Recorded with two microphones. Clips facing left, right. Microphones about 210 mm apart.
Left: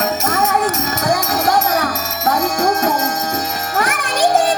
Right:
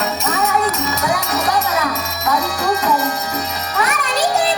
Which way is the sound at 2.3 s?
45° left (ahead or behind).